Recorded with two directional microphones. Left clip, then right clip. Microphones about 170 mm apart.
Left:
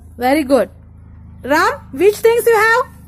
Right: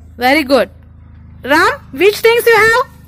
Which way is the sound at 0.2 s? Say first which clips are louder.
Right 3 dB; 5° left (ahead or behind).